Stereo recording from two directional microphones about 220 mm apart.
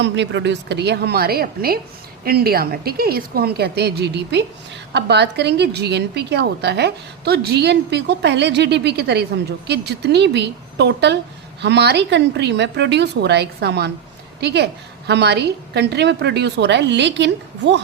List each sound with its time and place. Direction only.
0.0 s a woman's voice: 55° right (ahead or behind)